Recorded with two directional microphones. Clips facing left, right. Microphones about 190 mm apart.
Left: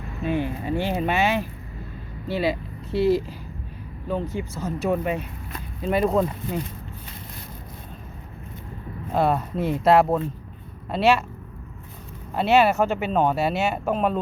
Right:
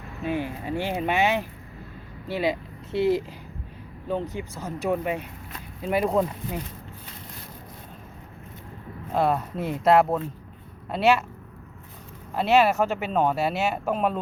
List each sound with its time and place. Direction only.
0.3 s speech: 10° right (ahead or behind)
9.1 s speech: centre (ahead or behind)
12.3 s speech: centre (ahead or behind)